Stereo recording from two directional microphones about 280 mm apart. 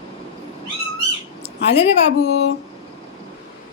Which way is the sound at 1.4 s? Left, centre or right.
Left.